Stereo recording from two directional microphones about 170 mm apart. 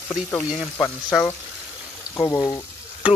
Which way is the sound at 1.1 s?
Centre (ahead or behind).